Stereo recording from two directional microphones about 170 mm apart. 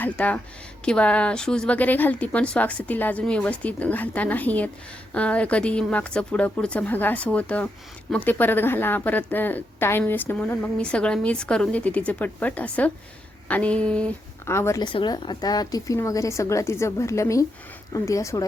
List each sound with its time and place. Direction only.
0.0 s a woman's voice: 10° left (ahead or behind)